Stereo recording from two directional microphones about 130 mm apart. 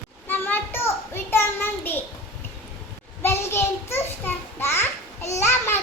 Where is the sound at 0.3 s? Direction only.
15° left (ahead or behind).